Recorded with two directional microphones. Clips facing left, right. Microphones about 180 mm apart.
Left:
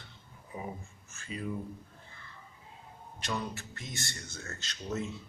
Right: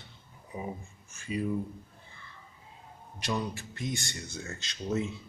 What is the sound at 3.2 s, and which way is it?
Speech, 15° right (ahead or behind).